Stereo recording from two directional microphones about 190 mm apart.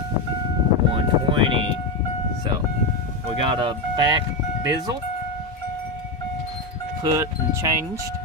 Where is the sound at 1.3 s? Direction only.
30° right (ahead or behind).